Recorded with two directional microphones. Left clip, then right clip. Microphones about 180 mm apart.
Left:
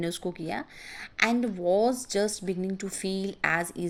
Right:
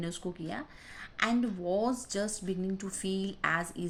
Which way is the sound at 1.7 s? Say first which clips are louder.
Left 7 dB; 35° left (ahead or behind).